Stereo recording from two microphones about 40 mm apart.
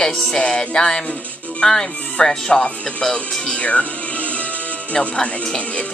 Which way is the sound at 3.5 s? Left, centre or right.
Left.